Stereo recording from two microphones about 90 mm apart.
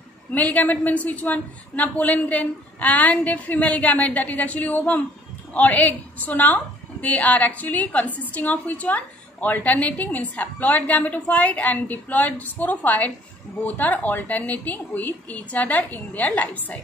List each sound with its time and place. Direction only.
0.3 s a woman's voice: 20° left (ahead or behind)